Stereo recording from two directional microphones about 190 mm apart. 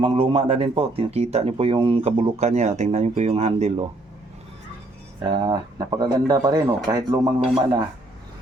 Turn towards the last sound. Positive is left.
turn(degrees=-20)  # may be behind; listen again after turning